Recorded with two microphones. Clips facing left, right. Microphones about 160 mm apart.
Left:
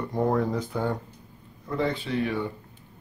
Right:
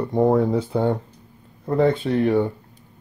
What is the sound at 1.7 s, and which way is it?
Speech, 55° right (ahead or behind).